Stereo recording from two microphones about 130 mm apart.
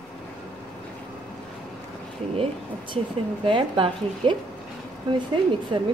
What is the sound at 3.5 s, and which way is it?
Speech, 40° right (ahead or behind).